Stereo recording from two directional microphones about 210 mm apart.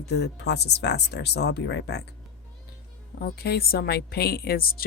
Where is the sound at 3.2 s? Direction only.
45° left (ahead or behind).